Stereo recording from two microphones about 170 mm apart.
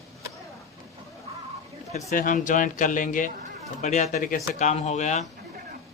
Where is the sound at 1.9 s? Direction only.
50° left (ahead or behind).